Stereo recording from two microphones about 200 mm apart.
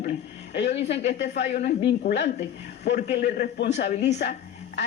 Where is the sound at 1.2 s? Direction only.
60° left (ahead or behind).